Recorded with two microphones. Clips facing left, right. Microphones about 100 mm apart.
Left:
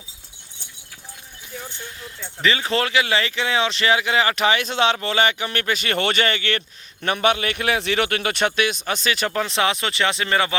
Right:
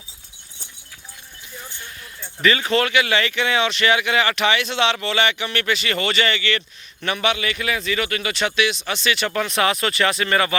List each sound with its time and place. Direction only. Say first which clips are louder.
2.4 s speech: right 2 dB; 20° left (ahead or behind)